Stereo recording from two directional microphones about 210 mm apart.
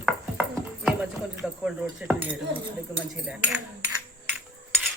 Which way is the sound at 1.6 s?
5° right (ahead or behind).